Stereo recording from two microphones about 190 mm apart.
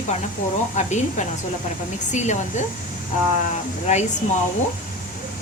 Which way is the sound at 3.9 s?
40° left (ahead or behind).